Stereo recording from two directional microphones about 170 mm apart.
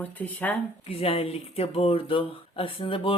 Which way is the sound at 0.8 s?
35° left (ahead or behind).